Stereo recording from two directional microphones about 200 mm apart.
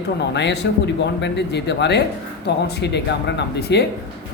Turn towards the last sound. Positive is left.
turn(degrees=60)  # may be behind; listen again after turning